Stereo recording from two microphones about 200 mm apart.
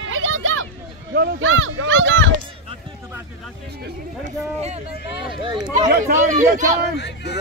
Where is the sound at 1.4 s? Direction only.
80° right.